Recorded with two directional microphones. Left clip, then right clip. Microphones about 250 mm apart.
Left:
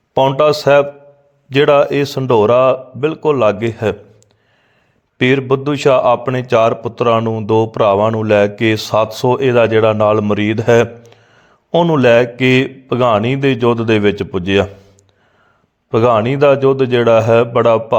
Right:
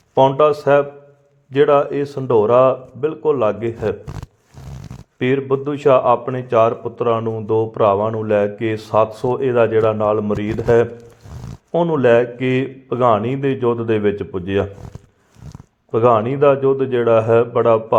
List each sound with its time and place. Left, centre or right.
0.1 s a man's voice: left
5.2 s a man's voice: left
15.9 s a man's voice: left